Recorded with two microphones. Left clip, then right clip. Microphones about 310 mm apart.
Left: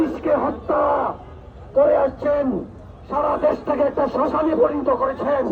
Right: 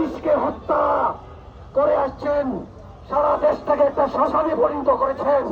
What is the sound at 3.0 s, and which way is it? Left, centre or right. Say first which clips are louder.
A man's voice: right 1 dB; right.